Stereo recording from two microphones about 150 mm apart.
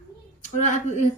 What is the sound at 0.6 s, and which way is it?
Speech, 55° left (ahead or behind).